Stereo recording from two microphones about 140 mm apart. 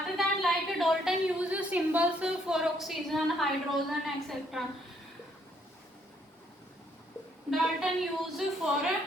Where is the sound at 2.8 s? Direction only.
Centre (ahead or behind).